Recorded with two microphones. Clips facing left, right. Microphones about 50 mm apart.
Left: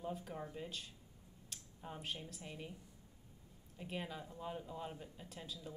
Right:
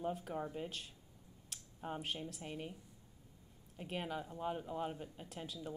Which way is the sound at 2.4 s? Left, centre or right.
Right.